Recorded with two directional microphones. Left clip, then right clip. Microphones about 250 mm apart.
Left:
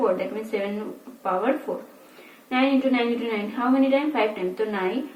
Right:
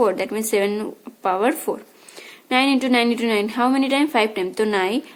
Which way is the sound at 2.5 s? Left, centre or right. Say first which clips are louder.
Right 4 dB; right.